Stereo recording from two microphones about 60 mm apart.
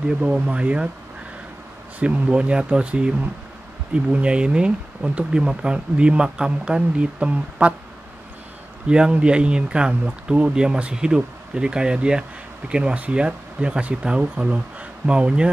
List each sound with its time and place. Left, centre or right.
0.2 s speech: centre
2.0 s speech: right
8.8 s speech: centre